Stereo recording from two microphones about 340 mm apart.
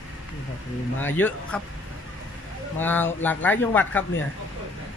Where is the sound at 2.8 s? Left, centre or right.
Centre.